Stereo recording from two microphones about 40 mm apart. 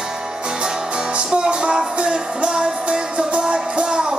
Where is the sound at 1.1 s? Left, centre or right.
Right.